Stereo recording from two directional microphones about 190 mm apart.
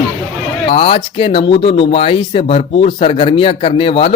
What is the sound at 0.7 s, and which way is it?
Speech, 30° left (ahead or behind).